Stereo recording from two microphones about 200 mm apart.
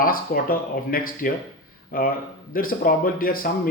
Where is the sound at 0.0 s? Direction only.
45° left (ahead or behind).